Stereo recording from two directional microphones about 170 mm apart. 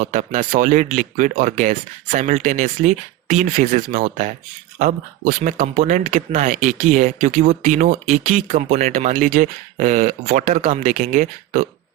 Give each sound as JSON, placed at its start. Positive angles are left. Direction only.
{"t": 0.0, "sound": "speech", "side_deg": -50}
{"t": 8.9, "sound": "speech", "side_deg": -50}